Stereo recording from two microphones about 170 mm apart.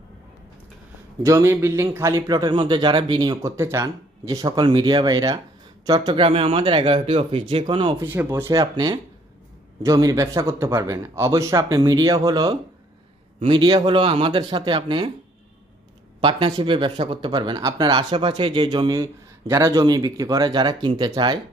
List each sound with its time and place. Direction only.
1.2 s a man's voice: 15° right (ahead or behind)
7.9 s a man's voice: 10° right (ahead or behind); by 15.1 s 30° right (ahead or behind)
16.2 s a man's voice: 30° right (ahead or behind)